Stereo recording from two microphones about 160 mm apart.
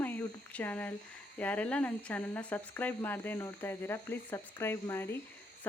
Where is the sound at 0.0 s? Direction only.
10° left (ahead or behind).